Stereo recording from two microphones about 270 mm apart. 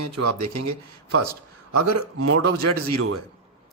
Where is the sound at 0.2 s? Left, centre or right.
Right.